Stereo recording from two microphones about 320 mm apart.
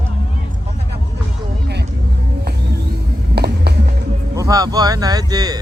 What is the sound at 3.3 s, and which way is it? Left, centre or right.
Music, right.